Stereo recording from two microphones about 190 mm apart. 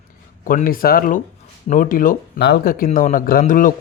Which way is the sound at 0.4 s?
50° left (ahead or behind).